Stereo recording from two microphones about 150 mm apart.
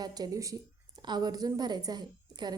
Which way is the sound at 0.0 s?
25° right (ahead or behind).